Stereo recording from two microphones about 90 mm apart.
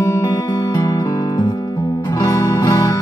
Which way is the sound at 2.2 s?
35° left (ahead or behind).